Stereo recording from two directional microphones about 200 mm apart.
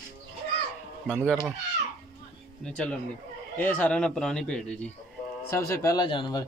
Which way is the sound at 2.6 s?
5° left (ahead or behind).